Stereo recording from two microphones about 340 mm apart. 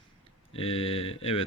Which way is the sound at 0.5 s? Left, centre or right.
Centre.